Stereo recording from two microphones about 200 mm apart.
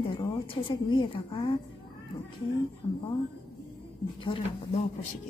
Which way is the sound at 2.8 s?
25° left (ahead or behind).